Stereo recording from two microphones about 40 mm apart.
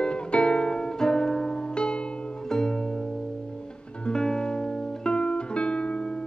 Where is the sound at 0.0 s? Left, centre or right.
Left.